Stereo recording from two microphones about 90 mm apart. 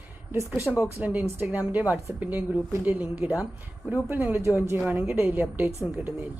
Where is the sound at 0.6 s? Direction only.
25° right (ahead or behind).